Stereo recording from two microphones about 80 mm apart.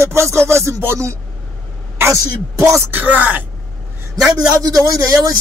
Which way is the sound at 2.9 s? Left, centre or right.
Right.